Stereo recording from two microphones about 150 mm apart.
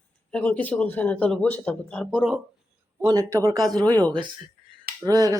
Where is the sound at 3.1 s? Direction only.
20° right (ahead or behind).